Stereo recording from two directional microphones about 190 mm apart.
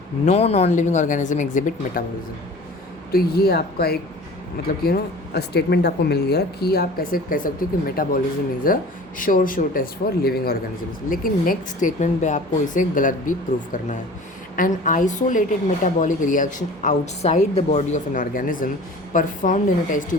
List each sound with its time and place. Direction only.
0.3 s speech: 35° left (ahead or behind)
3.1 s a woman's voice: 55° left (ahead or behind)
14.5 s a woman's voice: 45° left (ahead or behind)